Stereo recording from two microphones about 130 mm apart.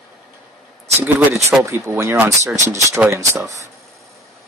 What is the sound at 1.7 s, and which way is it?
Speech, 20° right (ahead or behind).